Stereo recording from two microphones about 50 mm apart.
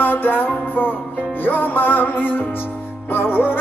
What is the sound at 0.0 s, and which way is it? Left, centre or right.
Music, left.